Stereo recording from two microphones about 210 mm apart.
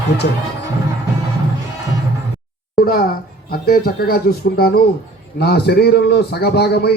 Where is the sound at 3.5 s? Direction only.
45° left (ahead or behind).